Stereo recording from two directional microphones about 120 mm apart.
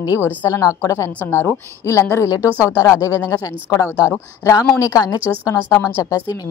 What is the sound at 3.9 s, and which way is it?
Speech, 10° right (ahead or behind).